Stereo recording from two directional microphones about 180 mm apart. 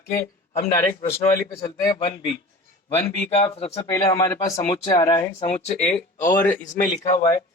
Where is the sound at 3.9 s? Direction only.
20° left (ahead or behind).